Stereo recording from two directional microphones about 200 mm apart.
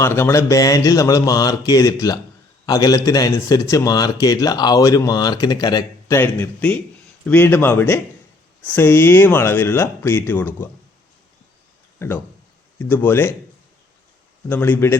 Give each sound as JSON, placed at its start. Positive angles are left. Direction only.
{"t": 0.0, "sound": "a man's voice", "side_deg": 10}
{"t": 11.9, "sound": "a man's voice", "side_deg": 10}
{"t": 14.5, "sound": "a man's voice", "side_deg": 10}